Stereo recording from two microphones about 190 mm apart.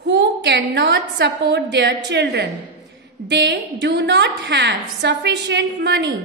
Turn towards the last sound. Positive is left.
turn(degrees=-65)  # may be behind; listen again after turning